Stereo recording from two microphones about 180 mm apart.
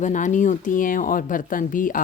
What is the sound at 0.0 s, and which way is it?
Speech, 45° left (ahead or behind).